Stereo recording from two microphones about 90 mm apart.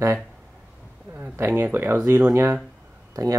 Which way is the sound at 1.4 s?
25° right (ahead or behind).